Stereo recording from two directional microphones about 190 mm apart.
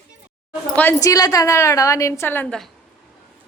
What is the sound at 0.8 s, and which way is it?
A woman's voice, 15° left (ahead or behind).